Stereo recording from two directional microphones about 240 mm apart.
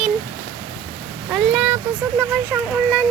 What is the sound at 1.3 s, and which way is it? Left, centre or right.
Speech, centre.